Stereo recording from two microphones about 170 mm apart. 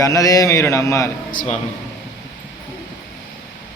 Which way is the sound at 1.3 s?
55° left (ahead or behind).